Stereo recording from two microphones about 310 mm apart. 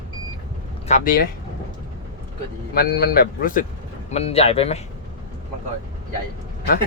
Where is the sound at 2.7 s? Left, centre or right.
Left.